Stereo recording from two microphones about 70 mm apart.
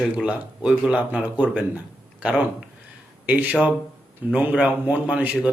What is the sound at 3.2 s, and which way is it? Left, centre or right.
Speech, right.